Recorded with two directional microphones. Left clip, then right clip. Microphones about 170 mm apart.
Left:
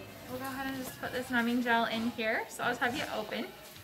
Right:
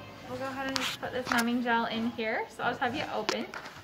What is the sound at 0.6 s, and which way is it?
A woman's voice, 20° right (ahead or behind).